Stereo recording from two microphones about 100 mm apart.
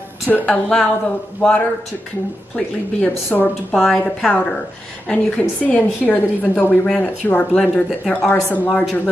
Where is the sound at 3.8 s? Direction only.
Centre (ahead or behind); by 6.7 s 20° left (ahead or behind).